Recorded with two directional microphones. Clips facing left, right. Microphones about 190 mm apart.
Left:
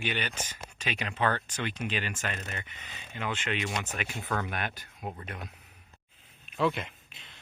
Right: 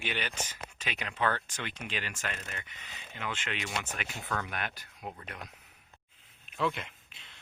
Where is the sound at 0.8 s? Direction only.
25° left (ahead or behind).